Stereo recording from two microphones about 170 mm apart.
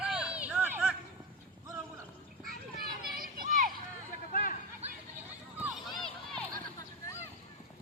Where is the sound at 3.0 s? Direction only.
Centre (ahead or behind).